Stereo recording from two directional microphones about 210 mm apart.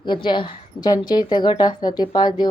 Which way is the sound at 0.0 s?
20° left (ahead or behind).